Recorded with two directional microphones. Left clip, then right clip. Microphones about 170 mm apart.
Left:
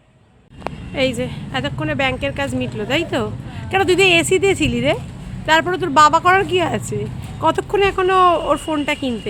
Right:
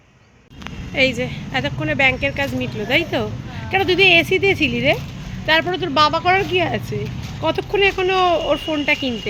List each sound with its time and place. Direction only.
1.2 s speech: 10° left (ahead or behind)